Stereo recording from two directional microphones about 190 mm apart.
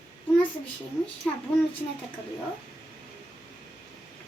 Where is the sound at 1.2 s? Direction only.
Centre (ahead or behind).